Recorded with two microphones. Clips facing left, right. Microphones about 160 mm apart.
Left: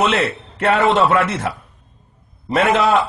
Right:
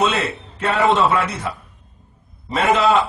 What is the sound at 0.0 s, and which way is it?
A man's voice, 70° left (ahead or behind).